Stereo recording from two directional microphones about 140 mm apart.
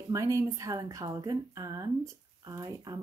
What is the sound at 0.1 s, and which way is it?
Speech, 20° right (ahead or behind).